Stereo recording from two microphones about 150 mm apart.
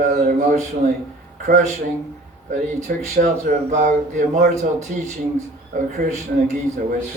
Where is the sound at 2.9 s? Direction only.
65° right (ahead or behind).